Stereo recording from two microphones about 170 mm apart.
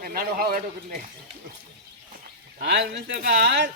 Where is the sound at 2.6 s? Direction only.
90° right.